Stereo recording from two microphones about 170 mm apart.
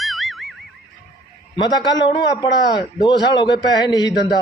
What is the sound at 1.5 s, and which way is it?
A man's voice, 25° left (ahead or behind).